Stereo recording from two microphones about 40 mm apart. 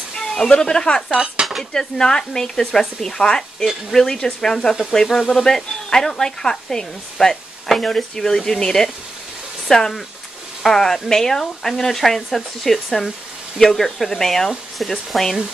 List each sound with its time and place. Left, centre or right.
0.1 s speech: centre
1.1 s dishes: centre
1.6 s speech: centre